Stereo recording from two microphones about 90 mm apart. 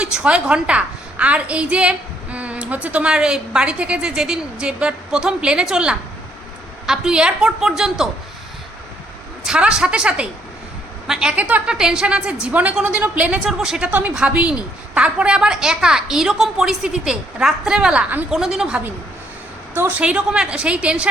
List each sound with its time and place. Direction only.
0.0 s a woman's voice: 10° right (ahead or behind)
9.5 s a woman's voice: 10° right (ahead or behind)
19.7 s a woman's voice: 25° right (ahead or behind)
20.0 s a woman's voice: 10° right (ahead or behind)